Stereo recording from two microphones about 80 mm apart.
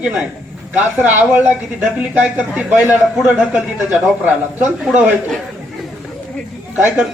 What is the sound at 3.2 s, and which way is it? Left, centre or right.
Speech, centre.